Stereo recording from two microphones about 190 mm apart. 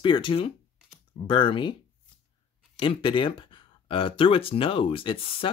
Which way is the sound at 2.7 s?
25° left (ahead or behind).